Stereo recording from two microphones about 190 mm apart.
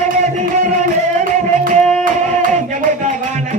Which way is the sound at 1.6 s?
45° right (ahead or behind).